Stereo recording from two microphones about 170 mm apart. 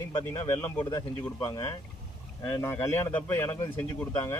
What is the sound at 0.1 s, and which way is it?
Speech, 15° left (ahead or behind).